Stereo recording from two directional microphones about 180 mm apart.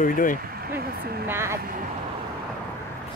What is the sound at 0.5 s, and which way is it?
Speech, 55° right (ahead or behind).